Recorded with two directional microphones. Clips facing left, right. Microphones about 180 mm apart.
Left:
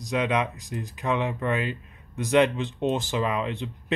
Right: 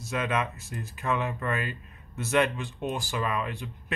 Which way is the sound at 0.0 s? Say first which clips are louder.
Left 4 dB; 15° left (ahead or behind).